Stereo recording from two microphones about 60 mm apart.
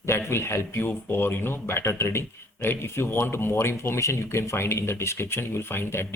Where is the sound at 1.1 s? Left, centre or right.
Left.